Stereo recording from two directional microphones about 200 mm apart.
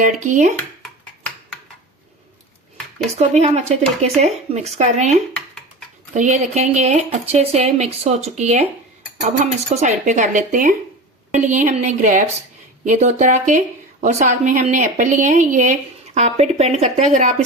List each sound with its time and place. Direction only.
0.0 s speech: 40° right (ahead or behind)
3.2 s speech: 35° right (ahead or behind)
6.1 s speech: 35° right (ahead or behind)